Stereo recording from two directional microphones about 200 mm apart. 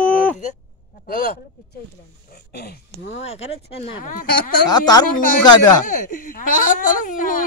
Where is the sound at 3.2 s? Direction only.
30° left (ahead or behind).